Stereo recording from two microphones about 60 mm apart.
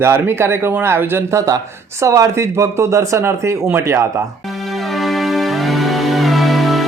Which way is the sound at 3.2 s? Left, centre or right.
Right.